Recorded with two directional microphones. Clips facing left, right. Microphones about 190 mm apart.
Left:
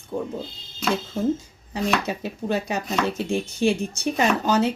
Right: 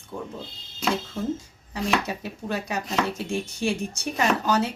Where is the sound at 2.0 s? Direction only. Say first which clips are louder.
Left 4 dB; 25° left (ahead or behind).